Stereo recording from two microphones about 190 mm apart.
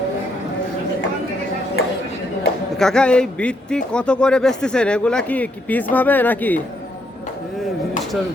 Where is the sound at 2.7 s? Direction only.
5° left (ahead or behind).